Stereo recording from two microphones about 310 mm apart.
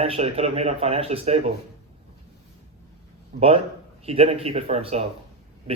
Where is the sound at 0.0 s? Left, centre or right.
Centre.